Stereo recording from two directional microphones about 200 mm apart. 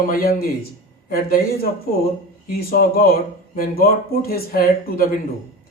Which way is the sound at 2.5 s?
50° left (ahead or behind).